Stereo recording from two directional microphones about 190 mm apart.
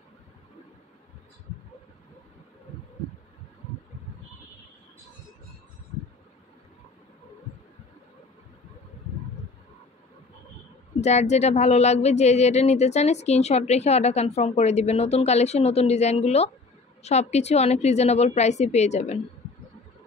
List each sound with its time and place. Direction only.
11.0 s speech: 35° left (ahead or behind)